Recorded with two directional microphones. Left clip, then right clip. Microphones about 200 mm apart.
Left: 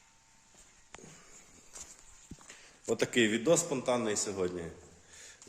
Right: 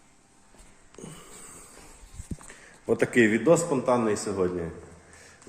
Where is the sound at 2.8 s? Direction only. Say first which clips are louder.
Right 7 dB; 20° left (ahead or behind).